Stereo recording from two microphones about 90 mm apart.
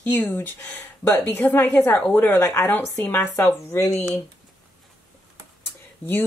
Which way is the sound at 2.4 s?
35° left (ahead or behind).